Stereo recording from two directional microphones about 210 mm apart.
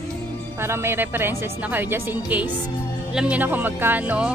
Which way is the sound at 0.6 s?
10° right (ahead or behind).